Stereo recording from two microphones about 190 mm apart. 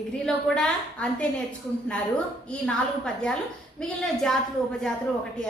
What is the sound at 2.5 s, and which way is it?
A woman's voice, 5° left (ahead or behind).